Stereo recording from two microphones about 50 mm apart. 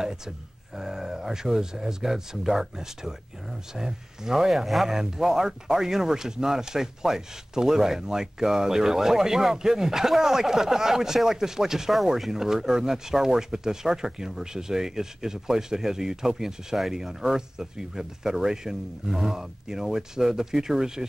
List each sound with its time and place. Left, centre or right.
0.7 s speech: centre